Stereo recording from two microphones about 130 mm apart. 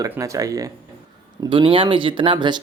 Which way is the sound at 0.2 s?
25° right (ahead or behind).